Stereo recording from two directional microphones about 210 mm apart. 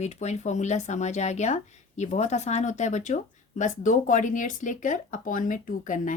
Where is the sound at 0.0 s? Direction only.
30° left (ahead or behind).